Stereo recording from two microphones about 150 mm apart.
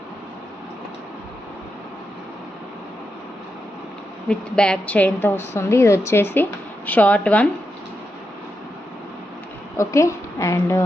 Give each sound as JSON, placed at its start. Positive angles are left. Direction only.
{"t": 4.3, "sound": "a woman's voice", "side_deg": 5}
{"t": 9.7, "sound": "a woman's voice", "side_deg": 20}